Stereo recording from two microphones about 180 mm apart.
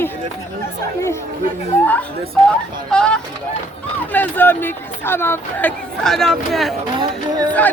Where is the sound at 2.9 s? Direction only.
5° left (ahead or behind).